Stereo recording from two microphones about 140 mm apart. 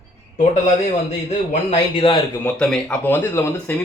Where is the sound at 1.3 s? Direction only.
40° left (ahead or behind).